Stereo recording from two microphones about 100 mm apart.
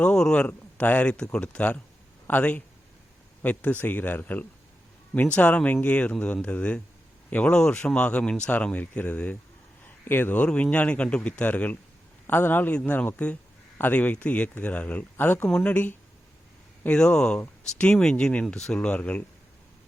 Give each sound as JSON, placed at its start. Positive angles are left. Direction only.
{"t": 0.0, "sound": "speech", "side_deg": 10}